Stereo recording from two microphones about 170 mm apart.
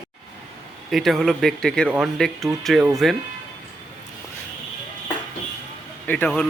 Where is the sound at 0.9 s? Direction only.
Centre (ahead or behind).